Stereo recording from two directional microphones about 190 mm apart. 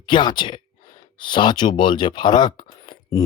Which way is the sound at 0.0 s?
25° left (ahead or behind).